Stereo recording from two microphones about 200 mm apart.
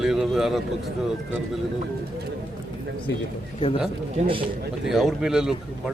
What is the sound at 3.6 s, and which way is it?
Speech, 30° left (ahead or behind).